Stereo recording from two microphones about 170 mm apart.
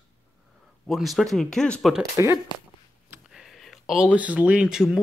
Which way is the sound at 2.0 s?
20° right (ahead or behind).